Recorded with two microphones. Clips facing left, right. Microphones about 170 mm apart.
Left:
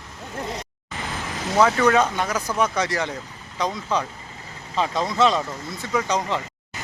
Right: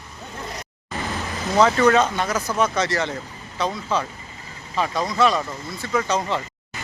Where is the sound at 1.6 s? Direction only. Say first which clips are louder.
Right 1 dB; 5° left (ahead or behind).